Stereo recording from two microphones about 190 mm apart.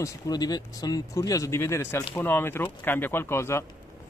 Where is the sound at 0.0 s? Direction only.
20° left (ahead or behind).